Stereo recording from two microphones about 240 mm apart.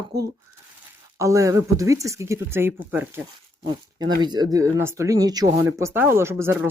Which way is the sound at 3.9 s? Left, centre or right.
Centre.